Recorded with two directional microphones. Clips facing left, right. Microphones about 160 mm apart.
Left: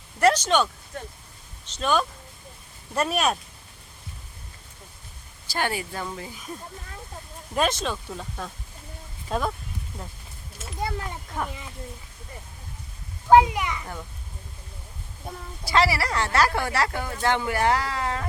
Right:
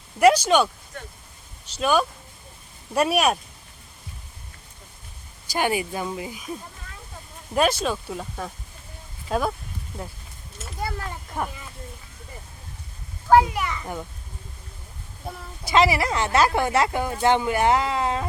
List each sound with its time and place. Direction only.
0.2 s speech: 10° right (ahead or behind)
1.7 s speech: 10° right (ahead or behind)
5.5 s speech: 15° right (ahead or behind)
10.8 s speech: 20° left (ahead or behind)
11.3 s speech: 10° right (ahead or behind)
13.3 s a child's voice: 20° left (ahead or behind)
15.3 s a woman's voice: centre (ahead or behind)
15.6 s speech: 20° right (ahead or behind)